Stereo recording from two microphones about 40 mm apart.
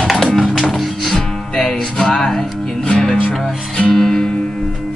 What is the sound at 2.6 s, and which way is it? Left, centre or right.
Music, centre.